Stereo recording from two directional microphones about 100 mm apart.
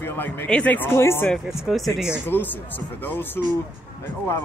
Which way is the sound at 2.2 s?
20° left (ahead or behind).